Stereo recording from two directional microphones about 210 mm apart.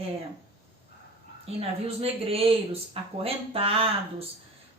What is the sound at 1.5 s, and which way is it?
Speech, 30° right (ahead or behind).